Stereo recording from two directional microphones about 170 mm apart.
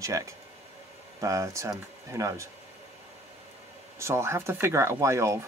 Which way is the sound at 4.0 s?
15° right (ahead or behind).